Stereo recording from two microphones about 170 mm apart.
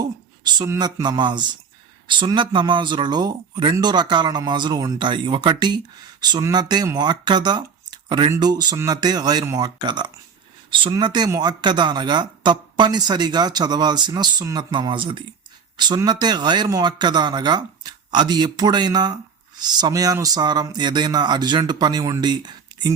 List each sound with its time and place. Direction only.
0.6 s speech: 25° right (ahead or behind)